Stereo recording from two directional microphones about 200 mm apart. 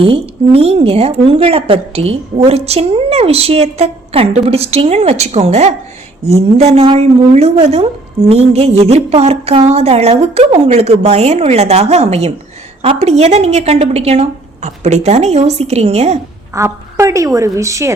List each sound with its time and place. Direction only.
0.0 s a woman's voice: 30° right (ahead or behind)
16.6 s a woman's voice: 15° right (ahead or behind)